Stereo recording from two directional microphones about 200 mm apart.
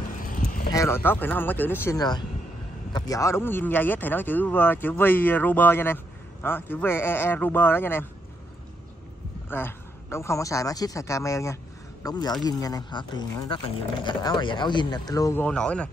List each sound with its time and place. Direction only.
0.2 s vehicle: 45° left (ahead or behind)
0.7 s speech: 15° left (ahead or behind)
9.5 s speech: 10° left (ahead or behind)